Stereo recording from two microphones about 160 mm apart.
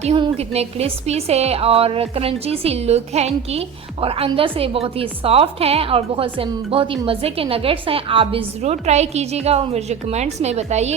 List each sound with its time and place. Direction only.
0.0 s a woman's voice: 35° right (ahead or behind)